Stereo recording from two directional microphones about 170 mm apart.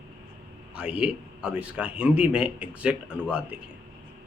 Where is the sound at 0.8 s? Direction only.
5° right (ahead or behind).